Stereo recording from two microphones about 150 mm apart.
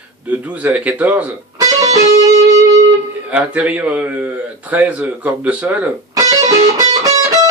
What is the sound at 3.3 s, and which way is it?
Speech, 10° right (ahead or behind).